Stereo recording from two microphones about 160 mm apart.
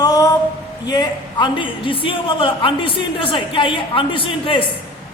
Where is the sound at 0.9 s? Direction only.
25° left (ahead or behind).